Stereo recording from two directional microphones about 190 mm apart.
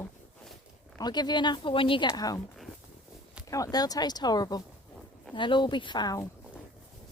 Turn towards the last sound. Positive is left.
turn(degrees=20)  # may be behind; listen again after turning